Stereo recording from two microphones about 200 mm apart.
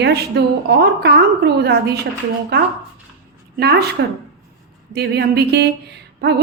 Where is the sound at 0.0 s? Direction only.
55° right (ahead or behind).